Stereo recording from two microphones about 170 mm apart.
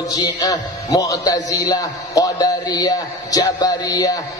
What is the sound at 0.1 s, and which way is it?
A man's voice, 20° left (ahead or behind).